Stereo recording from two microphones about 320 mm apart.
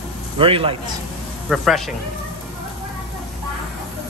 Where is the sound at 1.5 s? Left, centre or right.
Centre.